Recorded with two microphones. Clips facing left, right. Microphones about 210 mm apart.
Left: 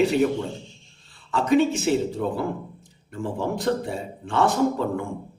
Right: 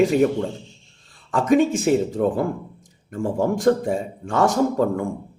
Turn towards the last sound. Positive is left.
turn(degrees=-45)  # may be behind; listen again after turning